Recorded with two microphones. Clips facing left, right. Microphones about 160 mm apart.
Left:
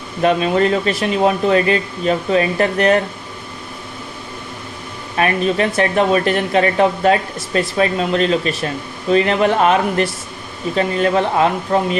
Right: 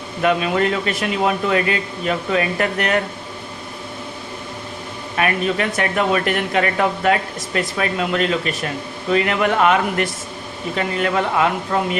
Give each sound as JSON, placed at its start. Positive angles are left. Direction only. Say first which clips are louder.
{"t": 0.2, "sound": "speech", "louder": "left 3 dB", "side_deg": 30}
{"t": 5.1, "sound": "speech", "louder": "left 3 dB", "side_deg": 30}